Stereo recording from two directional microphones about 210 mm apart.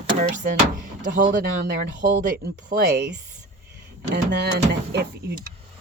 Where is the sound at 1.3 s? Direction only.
45° right (ahead or behind).